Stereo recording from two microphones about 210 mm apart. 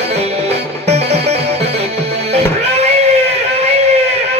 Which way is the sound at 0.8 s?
30° right (ahead or behind).